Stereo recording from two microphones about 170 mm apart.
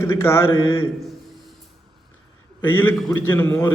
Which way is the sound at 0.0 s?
15° left (ahead or behind).